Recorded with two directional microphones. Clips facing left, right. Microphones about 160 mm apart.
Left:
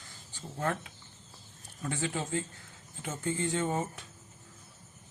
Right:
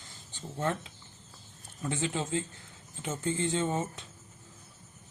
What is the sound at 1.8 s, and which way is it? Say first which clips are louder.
Speech: right 2 dB; 25° right (ahead or behind).